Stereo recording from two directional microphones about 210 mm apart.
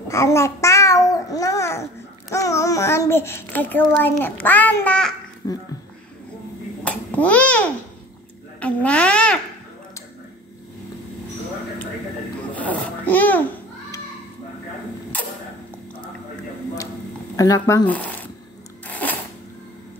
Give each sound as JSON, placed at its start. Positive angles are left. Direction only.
{"t": 0.1, "sound": "a child's voice", "side_deg": 15}
{"t": 5.4, "sound": "a child's voice", "side_deg": 15}
{"t": 6.8, "sound": "babbling", "side_deg": 5}
{"t": 8.5, "sound": "a child's voice", "side_deg": 5}
{"t": 12.5, "sound": "babbling", "side_deg": 5}
{"t": 17.4, "sound": "a child's voice", "side_deg": 15}
{"t": 18.9, "sound": "a sound", "side_deg": 5}